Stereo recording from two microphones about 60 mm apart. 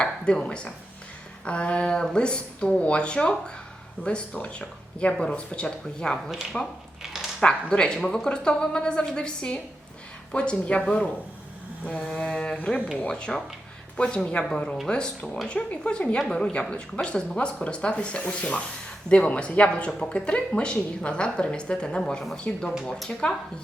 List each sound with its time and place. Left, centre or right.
0.0 s a woman's voice: centre
4.4 s a sound: left
4.6 s a woman's voice: centre
6.3 s speech: centre
7.0 s dog: centre
7.4 s a woman's voice: centre
10.3 s a sound: centre
13.1 s a woman's voice: centre
19.0 s a sound: centre
20.0 s a woman's voice: centre
22.8 s speech: centre